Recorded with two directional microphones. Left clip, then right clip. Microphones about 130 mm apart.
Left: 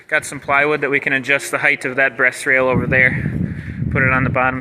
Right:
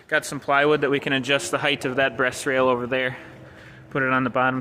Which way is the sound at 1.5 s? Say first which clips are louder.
Left 7 dB; 5° right (ahead or behind).